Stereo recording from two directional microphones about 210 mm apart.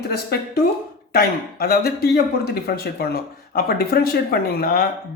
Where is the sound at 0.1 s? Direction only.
50° left (ahead or behind).